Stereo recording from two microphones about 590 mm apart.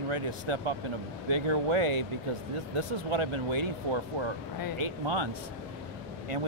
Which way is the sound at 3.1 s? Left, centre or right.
Right.